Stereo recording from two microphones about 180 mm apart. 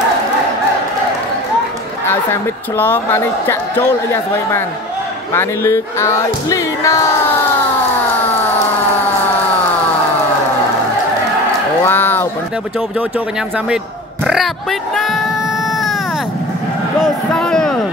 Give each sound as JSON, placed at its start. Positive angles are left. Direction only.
{"t": 2.8, "sound": "speech", "side_deg": 10}
{"t": 11.8, "sound": "a sound", "side_deg": 10}
{"t": 14.2, "sound": "speech", "side_deg": 0}
{"t": 17.0, "sound": "a man's voice", "side_deg": 5}